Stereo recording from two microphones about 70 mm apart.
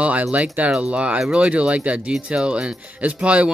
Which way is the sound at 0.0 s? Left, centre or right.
Centre.